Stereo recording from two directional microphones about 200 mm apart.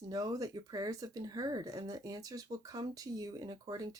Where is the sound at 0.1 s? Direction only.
20° right (ahead or behind).